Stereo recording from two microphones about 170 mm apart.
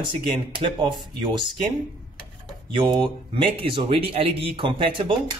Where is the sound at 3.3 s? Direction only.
30° right (ahead or behind).